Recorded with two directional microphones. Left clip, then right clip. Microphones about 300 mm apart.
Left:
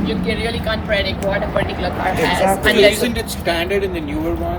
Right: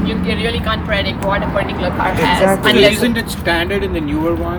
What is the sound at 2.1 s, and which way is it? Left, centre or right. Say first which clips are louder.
Speech: right 3 dB; right.